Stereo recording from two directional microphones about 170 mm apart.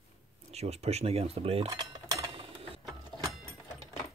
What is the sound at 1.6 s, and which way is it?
Cutlery, 20° right (ahead or behind).